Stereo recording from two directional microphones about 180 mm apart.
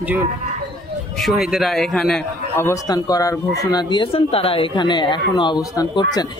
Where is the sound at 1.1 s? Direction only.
Centre (ahead or behind).